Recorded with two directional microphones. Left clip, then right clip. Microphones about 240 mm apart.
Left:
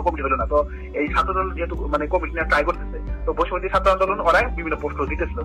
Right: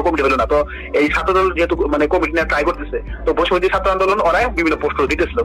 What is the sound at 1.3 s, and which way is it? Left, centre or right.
Speech, right.